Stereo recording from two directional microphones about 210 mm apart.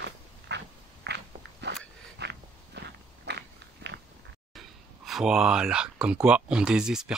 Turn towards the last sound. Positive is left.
turn(degrees=-5)  # may be behind; listen again after turning